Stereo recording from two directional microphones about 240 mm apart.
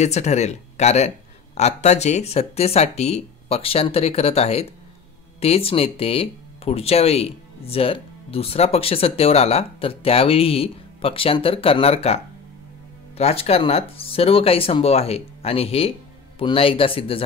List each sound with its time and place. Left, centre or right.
0.0 s speech: left
13.2 s speech: left